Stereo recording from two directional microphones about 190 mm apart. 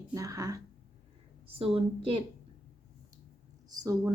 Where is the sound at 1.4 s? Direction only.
30° right (ahead or behind).